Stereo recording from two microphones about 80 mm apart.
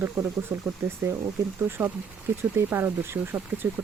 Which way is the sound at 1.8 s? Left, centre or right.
Right.